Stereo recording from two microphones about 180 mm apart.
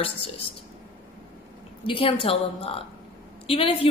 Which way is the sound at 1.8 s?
30° left (ahead or behind).